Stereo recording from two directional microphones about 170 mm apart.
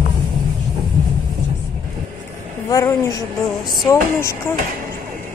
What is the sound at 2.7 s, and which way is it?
A woman's voice, 20° left (ahead or behind).